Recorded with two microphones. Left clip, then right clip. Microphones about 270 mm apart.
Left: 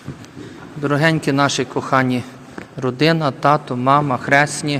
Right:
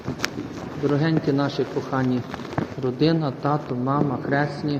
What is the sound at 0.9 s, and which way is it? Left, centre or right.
A man's voice, left.